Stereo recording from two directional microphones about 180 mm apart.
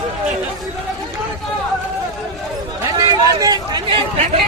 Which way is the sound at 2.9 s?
20° right (ahead or behind).